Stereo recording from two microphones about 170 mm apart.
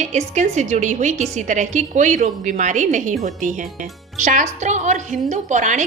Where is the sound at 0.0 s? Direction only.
40° right (ahead or behind).